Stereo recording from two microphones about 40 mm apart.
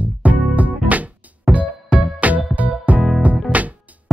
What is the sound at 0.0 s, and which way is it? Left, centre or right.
Music, right.